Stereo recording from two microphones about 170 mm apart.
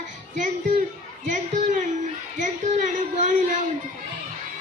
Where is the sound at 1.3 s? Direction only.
45° right (ahead or behind).